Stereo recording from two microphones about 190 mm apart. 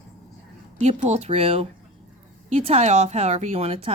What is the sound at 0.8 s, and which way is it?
Speech, 35° right (ahead or behind).